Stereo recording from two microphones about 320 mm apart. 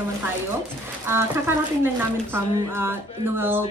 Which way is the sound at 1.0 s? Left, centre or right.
Centre.